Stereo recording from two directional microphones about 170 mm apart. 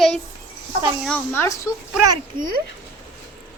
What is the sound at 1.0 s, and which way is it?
Speech, 10° left (ahead or behind).